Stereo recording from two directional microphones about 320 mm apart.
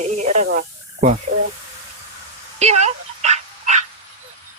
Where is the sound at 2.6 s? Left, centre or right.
Right.